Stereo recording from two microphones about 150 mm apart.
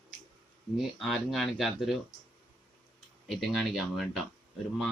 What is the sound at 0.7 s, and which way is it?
Speech, centre (ahead or behind).